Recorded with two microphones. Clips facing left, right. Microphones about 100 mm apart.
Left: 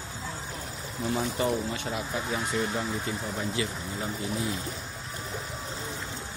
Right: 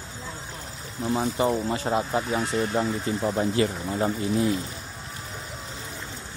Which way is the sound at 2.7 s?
40° right (ahead or behind).